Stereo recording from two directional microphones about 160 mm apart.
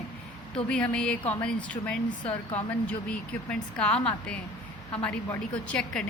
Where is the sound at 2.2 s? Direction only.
35° left (ahead or behind).